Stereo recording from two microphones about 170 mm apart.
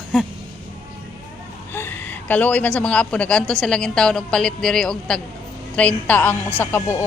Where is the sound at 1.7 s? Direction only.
10° left (ahead or behind).